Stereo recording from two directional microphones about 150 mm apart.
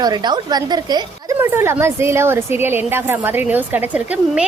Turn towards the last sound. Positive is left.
turn(degrees=-10)  # may be behind; listen again after turning